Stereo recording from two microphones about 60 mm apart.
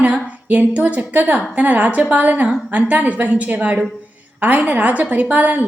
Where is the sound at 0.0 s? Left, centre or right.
Right.